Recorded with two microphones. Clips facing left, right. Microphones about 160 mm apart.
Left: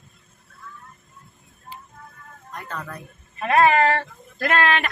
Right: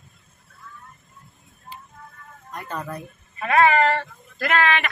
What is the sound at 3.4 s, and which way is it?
Speech, centre (ahead or behind).